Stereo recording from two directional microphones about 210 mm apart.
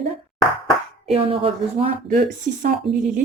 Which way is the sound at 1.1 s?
25° right (ahead or behind).